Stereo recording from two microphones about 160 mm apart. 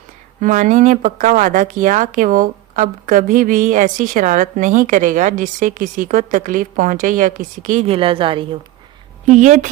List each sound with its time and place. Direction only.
0.3 s speech: 55° right (ahead or behind)
7.9 s a woman's voice: 35° right (ahead or behind)
9.2 s speech: 50° right (ahead or behind)